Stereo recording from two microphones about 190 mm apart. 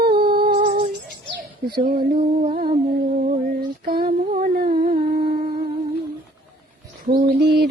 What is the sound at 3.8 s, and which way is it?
Female singing, 50° right (ahead or behind).